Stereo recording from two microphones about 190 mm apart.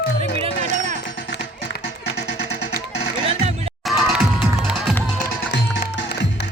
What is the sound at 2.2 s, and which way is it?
Music, 65° left (ahead or behind).